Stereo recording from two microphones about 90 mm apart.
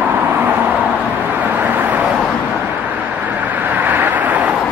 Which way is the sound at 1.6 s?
20° right (ahead or behind).